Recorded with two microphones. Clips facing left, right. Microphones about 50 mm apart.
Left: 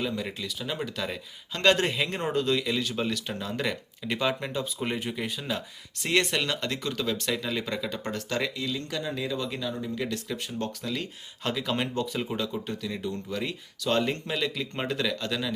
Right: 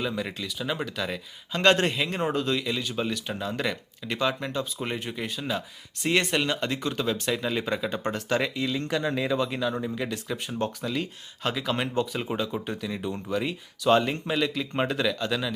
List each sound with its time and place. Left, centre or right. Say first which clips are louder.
0.0 s speech: right 1 dB; centre; by 9.4 s right
9.4 s speech: right 5 dB; right; by 15.5 s centre